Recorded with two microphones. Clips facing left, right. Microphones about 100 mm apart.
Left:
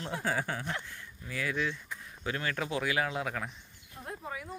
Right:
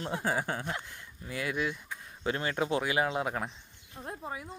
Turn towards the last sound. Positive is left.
turn(degrees=-25)  # may be behind; listen again after turning